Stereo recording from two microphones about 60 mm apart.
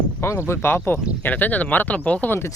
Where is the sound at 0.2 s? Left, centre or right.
Left.